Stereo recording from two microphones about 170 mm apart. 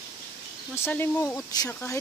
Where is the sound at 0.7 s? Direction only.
15° left (ahead or behind).